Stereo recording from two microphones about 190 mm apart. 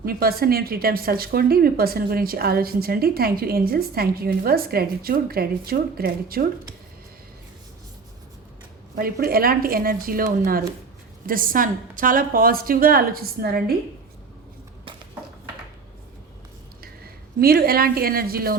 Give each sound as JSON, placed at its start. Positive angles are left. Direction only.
{"t": 0.0, "sound": "speech", "side_deg": -50}
{"t": 9.0, "sound": "speech", "side_deg": -50}
{"t": 16.8, "sound": "a woman's voice", "side_deg": -50}